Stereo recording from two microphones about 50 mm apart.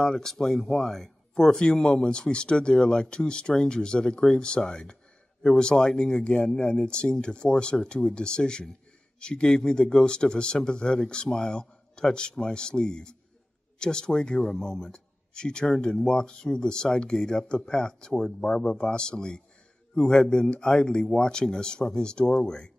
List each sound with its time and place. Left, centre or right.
0.0 s speech: centre